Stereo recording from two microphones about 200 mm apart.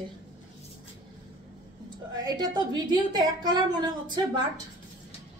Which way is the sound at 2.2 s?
20° right (ahead or behind).